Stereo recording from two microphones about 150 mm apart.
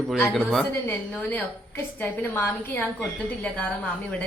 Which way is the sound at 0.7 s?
15° left (ahead or behind).